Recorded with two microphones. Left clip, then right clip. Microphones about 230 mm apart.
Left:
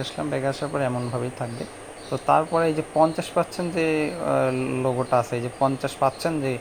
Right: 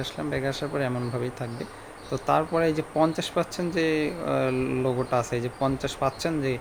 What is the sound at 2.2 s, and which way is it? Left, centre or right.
Speech, centre.